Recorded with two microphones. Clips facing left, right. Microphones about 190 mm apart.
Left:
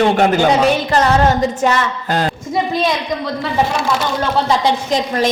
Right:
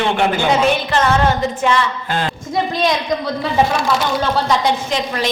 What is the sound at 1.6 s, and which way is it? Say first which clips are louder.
Speech: left 1 dB; 40° left (ahead or behind).